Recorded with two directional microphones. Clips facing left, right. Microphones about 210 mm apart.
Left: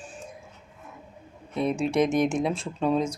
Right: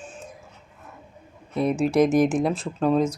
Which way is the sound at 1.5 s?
5° right (ahead or behind).